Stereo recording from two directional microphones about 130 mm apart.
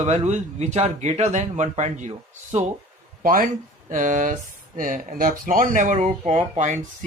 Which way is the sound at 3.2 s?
90° right.